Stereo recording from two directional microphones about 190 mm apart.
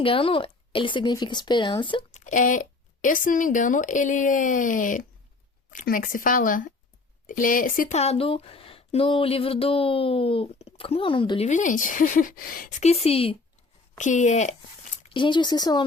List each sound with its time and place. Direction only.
0.0 s speech: 30° left (ahead or behind)
2.1 s speech: 40° left (ahead or behind)
12.8 s speech: 35° left (ahead or behind)
15.0 s speech: 25° left (ahead or behind)